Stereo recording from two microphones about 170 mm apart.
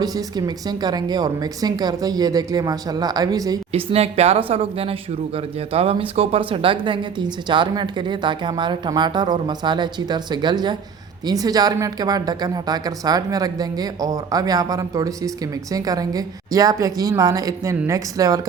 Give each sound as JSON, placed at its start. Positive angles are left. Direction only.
{"t": 0.0, "sound": "speech", "side_deg": -20}
{"t": 3.7, "sound": "speech", "side_deg": -35}